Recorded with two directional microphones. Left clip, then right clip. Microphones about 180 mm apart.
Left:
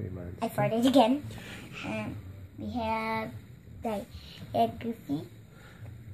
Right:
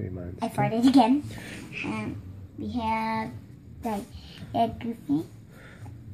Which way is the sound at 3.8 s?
35° left (ahead or behind).